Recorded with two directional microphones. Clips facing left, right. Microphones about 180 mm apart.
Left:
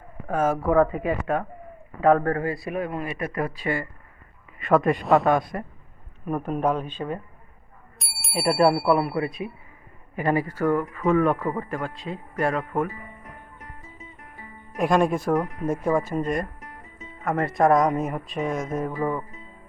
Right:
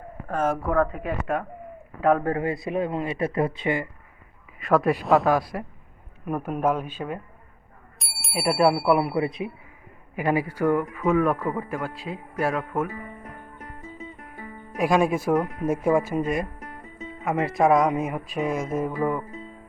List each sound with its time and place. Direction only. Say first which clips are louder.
0.3 s speech: left 2 dB; 5° left (ahead or behind)
2.2 s a man's voice: even; 20° right (ahead or behind)
4.5 s speech: left 1 dB; centre (ahead or behind)
9.0 s a man's voice: right 1 dB; 20° right (ahead or behind)
10.2 s speech: even; 10° right (ahead or behind)
14.8 s speech: even; 5° right (ahead or behind)